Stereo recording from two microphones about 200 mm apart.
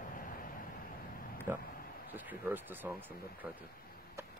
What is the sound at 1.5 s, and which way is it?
Speech, 10° right (ahead or behind).